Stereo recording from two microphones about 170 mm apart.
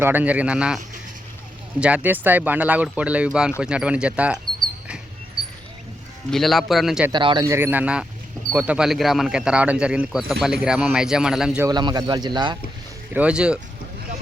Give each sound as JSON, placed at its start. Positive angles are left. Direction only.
{"t": 0.0, "sound": "speech", "side_deg": -10}
{"t": 1.8, "sound": "speech", "side_deg": -10}
{"t": 6.3, "sound": "speech", "side_deg": 0}
{"t": 7.1, "sound": "speech", "side_deg": -25}
{"t": 11.6, "sound": "speech", "side_deg": -25}
{"t": 13.1, "sound": "speech", "side_deg": -5}